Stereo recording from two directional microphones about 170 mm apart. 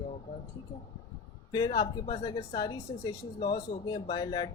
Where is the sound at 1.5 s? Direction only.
25° left (ahead or behind).